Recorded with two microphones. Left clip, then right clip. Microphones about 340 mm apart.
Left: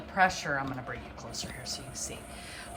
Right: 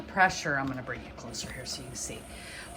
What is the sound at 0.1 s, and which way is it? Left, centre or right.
A woman's voice, centre.